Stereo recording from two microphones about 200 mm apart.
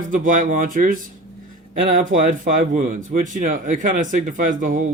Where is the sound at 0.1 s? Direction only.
40° right (ahead or behind).